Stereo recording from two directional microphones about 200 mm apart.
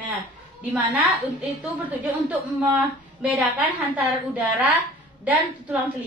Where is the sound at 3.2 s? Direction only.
5° right (ahead or behind).